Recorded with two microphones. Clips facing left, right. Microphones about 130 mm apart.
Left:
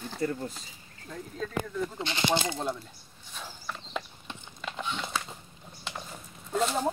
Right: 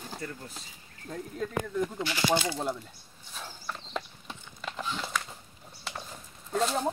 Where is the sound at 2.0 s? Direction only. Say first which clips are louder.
Left 1 dB; 25° left (ahead or behind).